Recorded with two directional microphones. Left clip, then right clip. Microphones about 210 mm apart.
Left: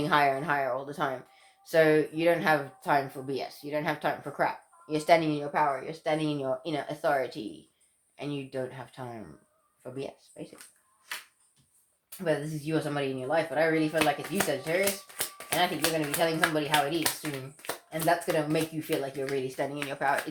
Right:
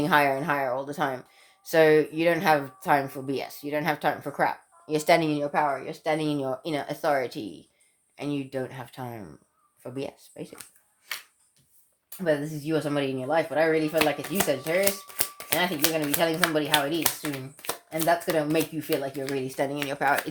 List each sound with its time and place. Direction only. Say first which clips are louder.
0.0 s speech: right 3 dB; 45° right (ahead or behind)
12.2 s speech: right 4 dB; 40° right (ahead or behind)
14.0 s speech: right 2 dB; 30° right (ahead or behind); by 20.1 s 45° right (ahead or behind)